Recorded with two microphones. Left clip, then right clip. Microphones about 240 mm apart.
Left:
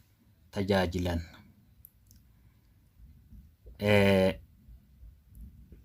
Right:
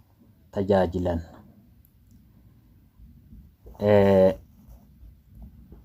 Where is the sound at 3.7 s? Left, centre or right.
Left.